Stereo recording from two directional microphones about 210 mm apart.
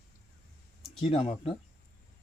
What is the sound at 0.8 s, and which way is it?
Speech, 25° left (ahead or behind).